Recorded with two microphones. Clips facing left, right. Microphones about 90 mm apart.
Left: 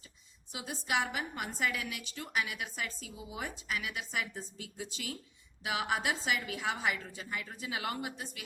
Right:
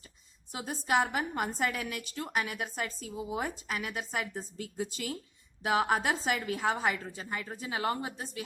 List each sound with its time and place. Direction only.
0.5 s a woman's voice: 40° right (ahead or behind)